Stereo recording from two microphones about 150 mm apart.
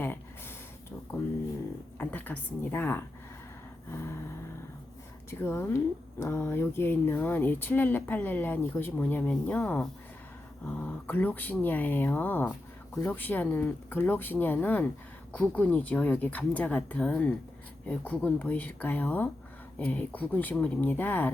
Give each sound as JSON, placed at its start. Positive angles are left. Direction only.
{"t": 0.0, "sound": "a sound", "side_deg": 15}
{"t": 2.0, "sound": "a woman's voice", "side_deg": 10}
{"t": 5.3, "sound": "speech", "side_deg": 15}